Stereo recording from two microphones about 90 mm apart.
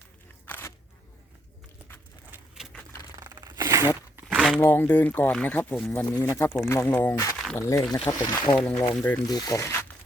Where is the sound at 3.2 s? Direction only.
45° right (ahead or behind).